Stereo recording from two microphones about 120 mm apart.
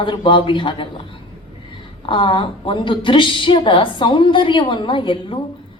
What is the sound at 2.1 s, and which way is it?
A woman's voice, 45° left (ahead or behind).